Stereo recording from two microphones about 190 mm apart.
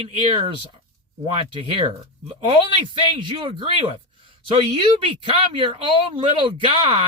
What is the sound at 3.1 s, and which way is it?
Speech, 25° right (ahead or behind).